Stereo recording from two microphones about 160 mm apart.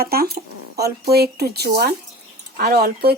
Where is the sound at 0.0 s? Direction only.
70° right (ahead or behind).